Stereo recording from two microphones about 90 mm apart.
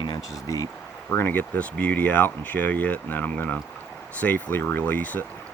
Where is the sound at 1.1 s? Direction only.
25° left (ahead or behind).